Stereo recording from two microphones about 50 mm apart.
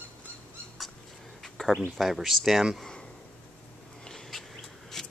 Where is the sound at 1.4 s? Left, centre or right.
Centre.